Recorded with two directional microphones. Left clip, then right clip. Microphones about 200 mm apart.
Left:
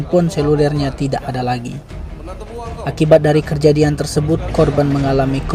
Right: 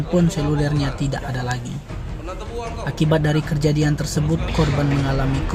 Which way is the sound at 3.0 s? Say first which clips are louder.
Left 10 dB; 25° left (ahead or behind).